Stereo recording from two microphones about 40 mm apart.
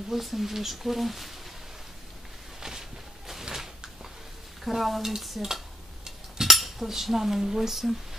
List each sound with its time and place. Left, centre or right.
0.1 s speech: centre
2.6 s a sound: centre
4.6 s speech: centre
5.1 s stir: centre
6.0 s a sound: centre
6.5 s cutlery: centre